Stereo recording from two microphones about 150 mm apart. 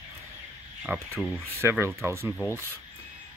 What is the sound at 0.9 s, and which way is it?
Speech, 10° right (ahead or behind).